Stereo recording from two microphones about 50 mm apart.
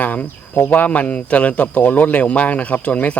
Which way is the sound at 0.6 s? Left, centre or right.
Left.